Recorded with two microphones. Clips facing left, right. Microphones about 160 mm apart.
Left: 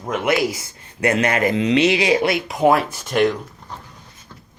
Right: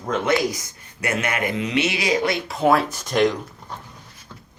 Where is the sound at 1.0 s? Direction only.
35° left (ahead or behind).